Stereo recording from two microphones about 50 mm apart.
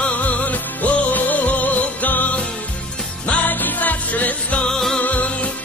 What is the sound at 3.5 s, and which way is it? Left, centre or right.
Music, left.